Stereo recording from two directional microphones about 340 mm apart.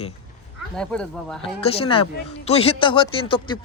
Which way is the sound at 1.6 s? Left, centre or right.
Centre.